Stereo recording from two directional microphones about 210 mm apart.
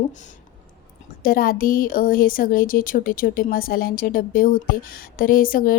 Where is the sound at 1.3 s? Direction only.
45° left (ahead or behind).